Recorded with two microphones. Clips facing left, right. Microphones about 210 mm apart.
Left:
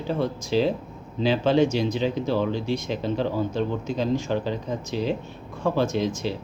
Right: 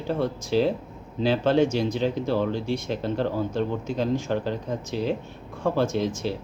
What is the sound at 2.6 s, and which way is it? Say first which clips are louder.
Speech: left 1 dB; 35° left (ahead or behind).